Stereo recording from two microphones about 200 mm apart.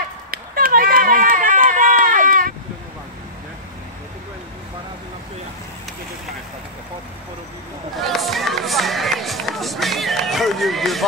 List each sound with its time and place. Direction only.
0.3 s run: 45° right (ahead or behind)
8.0 s run: centre (ahead or behind)